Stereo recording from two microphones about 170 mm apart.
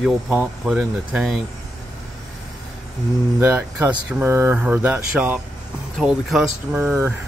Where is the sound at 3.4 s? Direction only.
15° right (ahead or behind).